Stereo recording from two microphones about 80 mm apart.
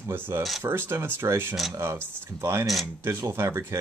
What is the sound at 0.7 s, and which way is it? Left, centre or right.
Speech, right.